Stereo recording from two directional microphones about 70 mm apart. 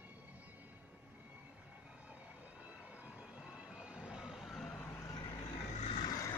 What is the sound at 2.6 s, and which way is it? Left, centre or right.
Train, centre.